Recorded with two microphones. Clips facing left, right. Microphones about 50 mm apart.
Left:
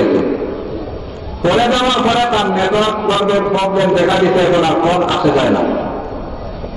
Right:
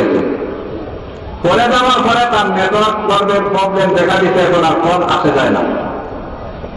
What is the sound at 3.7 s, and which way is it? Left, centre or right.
A man's voice, centre.